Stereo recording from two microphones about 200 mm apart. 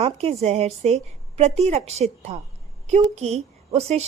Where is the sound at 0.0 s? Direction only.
30° right (ahead or behind).